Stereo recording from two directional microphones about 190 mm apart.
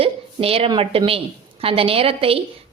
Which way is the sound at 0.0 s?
30° right (ahead or behind).